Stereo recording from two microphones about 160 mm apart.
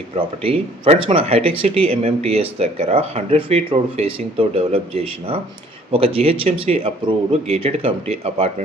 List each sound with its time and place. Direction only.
0.2 s speech: 35° right (ahead or behind)